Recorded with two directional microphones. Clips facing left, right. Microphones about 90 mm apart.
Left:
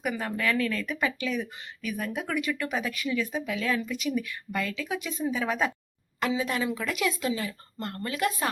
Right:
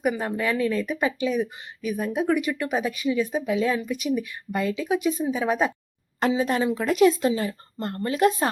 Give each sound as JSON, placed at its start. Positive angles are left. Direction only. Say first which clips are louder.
{"t": 0.0, "sound": "speech", "louder": "right 4 dB", "side_deg": -20}
{"t": 6.1, "sound": "speech", "louder": "right 5 dB", "side_deg": -35}